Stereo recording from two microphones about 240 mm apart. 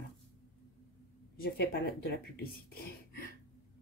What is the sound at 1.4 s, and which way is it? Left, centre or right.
Speech, left.